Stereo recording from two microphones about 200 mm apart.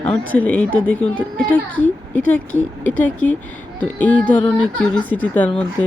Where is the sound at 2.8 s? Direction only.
10° left (ahead or behind).